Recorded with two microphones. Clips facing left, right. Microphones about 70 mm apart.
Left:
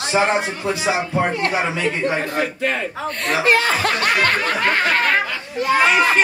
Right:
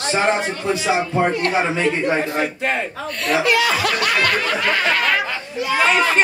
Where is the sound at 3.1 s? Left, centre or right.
Left.